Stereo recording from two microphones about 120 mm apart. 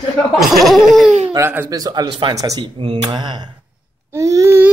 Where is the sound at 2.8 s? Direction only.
45° right (ahead or behind).